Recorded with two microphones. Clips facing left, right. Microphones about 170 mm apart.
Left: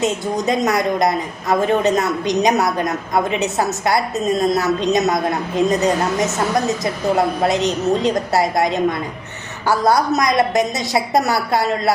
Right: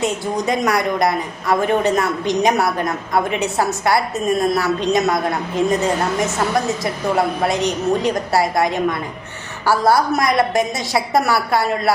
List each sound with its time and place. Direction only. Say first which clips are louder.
0.0 s a woman's voice: left 1 dB; 20° left (ahead or behind)